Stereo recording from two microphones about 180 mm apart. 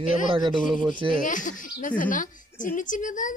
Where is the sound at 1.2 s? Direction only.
45° left (ahead or behind).